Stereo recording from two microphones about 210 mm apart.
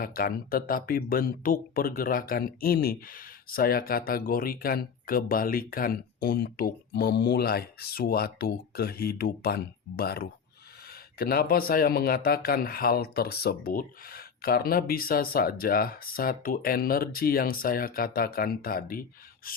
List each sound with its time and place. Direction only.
0.0 s speech: 45° left (ahead or behind)